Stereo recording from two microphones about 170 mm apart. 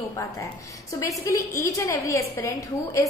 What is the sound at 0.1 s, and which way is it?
A woman's voice, 20° left (ahead or behind).